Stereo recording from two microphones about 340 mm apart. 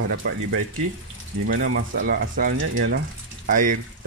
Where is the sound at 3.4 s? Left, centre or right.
Right.